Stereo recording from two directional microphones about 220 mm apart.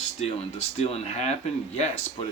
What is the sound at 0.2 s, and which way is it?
Speech, 30° left (ahead or behind).